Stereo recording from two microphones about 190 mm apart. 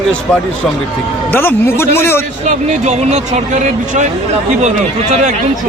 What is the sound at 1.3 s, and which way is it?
Speech, 10° left (ahead or behind).